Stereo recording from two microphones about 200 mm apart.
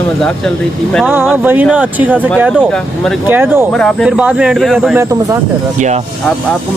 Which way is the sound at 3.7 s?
Centre (ahead or behind).